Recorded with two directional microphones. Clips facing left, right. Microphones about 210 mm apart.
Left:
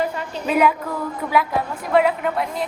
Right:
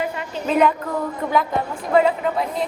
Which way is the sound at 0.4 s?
5° left (ahead or behind).